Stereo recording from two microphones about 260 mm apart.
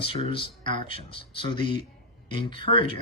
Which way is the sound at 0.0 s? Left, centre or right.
Left.